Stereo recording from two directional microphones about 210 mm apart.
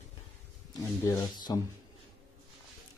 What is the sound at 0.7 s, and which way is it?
Speech, 20° left (ahead or behind).